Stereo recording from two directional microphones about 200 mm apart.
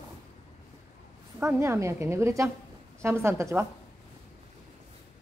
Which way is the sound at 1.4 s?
15° right (ahead or behind).